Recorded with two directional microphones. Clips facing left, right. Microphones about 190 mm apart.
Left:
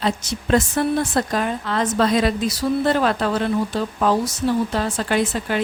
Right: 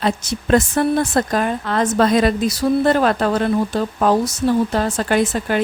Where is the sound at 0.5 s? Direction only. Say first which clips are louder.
Right 3 dB; 50° right (ahead or behind).